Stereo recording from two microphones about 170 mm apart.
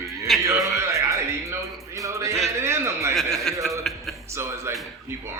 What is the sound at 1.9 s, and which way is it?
Music, 20° right (ahead or behind).